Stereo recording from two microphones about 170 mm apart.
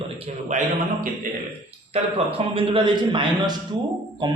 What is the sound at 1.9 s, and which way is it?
A man's voice, 35° right (ahead or behind).